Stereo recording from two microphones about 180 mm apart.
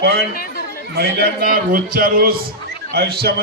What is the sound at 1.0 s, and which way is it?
A man's voice, 60° right (ahead or behind).